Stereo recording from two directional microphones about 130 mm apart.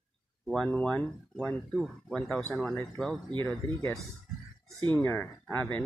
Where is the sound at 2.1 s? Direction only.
Centre (ahead or behind).